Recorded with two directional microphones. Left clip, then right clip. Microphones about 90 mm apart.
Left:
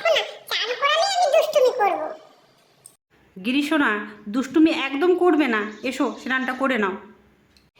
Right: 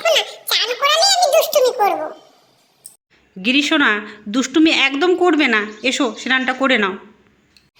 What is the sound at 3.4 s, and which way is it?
A woman's voice, 30° right (ahead or behind).